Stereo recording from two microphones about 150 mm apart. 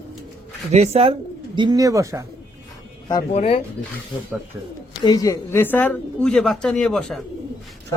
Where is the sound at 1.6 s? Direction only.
25° right (ahead or behind).